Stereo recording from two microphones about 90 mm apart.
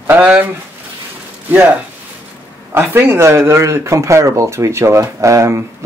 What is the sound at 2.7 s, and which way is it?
Speech, 25° right (ahead or behind).